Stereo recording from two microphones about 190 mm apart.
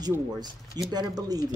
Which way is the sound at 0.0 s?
20° right (ahead or behind).